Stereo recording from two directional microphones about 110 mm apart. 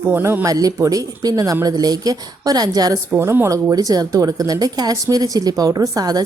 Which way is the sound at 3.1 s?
20° right (ahead or behind).